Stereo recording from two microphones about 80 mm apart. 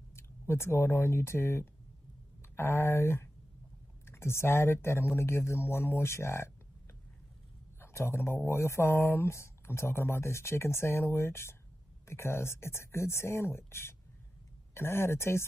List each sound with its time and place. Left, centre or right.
0.1 s speech: left
7.8 s speech: left